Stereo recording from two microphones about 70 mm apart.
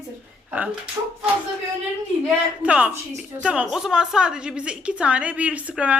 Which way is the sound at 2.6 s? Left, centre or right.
Centre.